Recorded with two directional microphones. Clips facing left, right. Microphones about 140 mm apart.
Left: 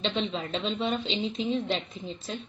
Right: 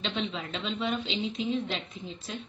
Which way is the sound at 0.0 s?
25° left (ahead or behind).